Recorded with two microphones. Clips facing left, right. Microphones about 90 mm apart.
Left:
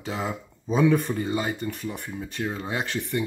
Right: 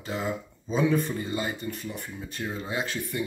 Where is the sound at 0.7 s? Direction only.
65° left (ahead or behind).